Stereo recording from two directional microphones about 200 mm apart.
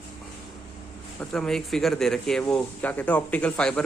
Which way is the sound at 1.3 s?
Centre (ahead or behind).